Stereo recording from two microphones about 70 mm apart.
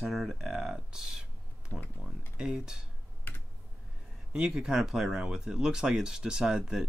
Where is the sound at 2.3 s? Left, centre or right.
Centre.